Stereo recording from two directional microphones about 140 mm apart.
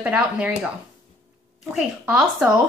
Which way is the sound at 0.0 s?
10° right (ahead or behind).